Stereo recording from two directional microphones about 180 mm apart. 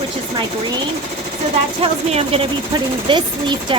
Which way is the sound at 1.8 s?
30° right (ahead or behind).